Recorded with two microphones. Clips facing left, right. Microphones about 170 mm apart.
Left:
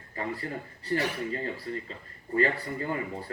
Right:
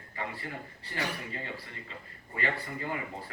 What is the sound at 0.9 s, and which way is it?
Speech, 40° left (ahead or behind).